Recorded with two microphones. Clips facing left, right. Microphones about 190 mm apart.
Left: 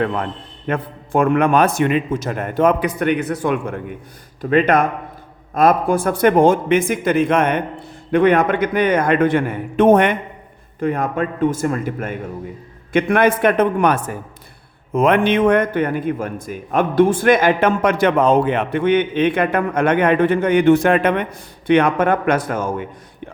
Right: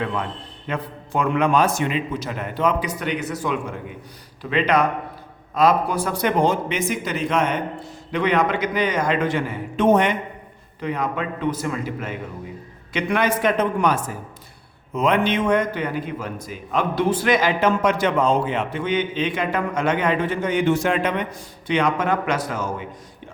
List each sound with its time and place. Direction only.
0.0 s a man's voice: 50° left (ahead or behind)